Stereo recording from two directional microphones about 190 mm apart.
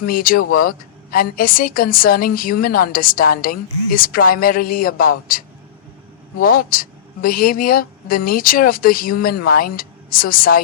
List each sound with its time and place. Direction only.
0.0 s a woman's voice: 50° left (ahead or behind)
6.4 s a woman's voice: 50° left (ahead or behind)